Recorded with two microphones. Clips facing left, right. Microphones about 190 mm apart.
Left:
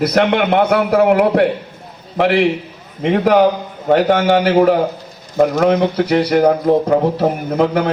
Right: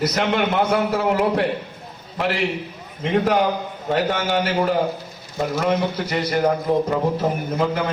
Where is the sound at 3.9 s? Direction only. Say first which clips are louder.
Left 9 dB; 60° left (ahead or behind).